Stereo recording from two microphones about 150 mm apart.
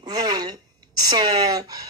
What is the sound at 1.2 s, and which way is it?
Speech, 25° right (ahead or behind).